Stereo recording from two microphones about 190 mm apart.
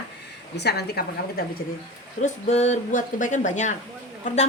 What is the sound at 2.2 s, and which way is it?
Speech, 35° left (ahead or behind).